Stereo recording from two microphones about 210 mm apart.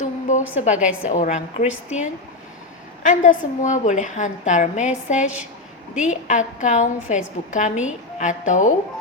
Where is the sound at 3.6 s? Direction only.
35° left (ahead or behind).